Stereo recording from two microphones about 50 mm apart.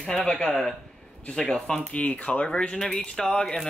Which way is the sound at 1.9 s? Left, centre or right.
Left.